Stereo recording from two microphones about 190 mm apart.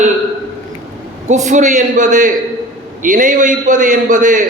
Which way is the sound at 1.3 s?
40° right (ahead or behind).